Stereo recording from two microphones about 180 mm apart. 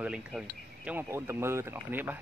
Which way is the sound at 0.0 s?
5° right (ahead or behind).